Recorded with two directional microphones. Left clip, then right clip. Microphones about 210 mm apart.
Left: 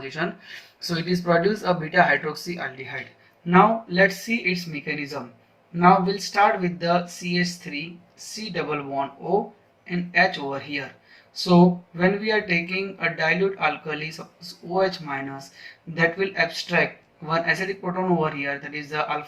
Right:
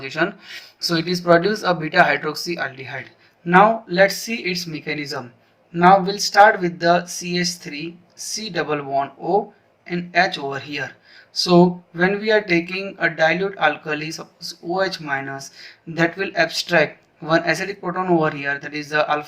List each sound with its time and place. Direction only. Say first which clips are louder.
0.0 s speech: right 6 dB; 35° right (ahead or behind)